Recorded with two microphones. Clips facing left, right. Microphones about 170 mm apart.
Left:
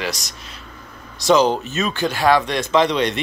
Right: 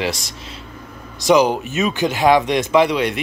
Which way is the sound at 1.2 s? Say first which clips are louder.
Right 1 dB; 15° right (ahead or behind).